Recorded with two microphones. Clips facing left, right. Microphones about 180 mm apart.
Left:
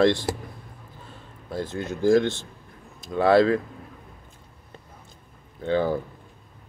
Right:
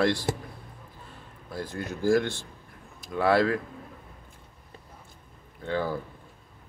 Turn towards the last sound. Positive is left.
turn(degrees=25)  # may be behind; listen again after turning